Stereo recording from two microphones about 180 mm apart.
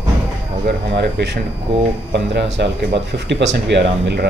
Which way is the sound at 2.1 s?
75° right (ahead or behind).